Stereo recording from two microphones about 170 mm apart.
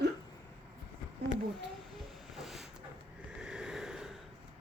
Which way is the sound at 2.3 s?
Centre (ahead or behind).